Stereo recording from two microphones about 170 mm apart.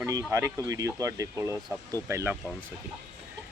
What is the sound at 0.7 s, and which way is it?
Speech, 20° right (ahead or behind).